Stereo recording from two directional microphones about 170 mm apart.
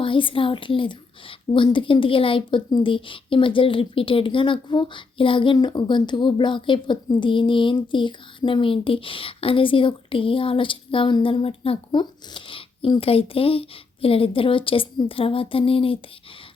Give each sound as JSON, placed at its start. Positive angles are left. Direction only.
{"t": 0.0, "sound": "a woman's voice", "side_deg": 30}